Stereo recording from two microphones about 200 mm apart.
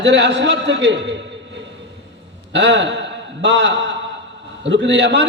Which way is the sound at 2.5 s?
60° right (ahead or behind).